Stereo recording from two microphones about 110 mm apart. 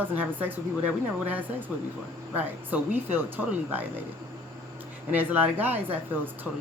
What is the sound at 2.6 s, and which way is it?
Speech, 15° right (ahead or behind).